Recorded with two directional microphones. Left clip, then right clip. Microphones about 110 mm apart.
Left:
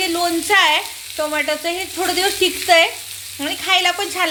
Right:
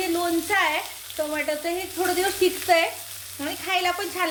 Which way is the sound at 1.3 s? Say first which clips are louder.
Left 7 dB; 30° left (ahead or behind).